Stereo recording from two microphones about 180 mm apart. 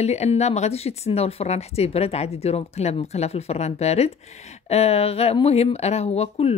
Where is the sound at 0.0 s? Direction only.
35° left (ahead or behind).